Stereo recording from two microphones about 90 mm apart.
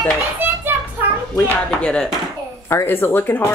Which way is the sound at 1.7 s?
10° left (ahead or behind).